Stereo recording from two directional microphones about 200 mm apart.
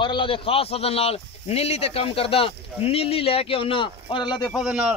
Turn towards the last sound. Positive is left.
turn(degrees=-5)  # may be behind; listen again after turning